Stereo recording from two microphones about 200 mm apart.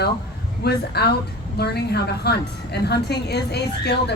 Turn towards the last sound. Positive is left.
turn(degrees=55)  # may be behind; listen again after turning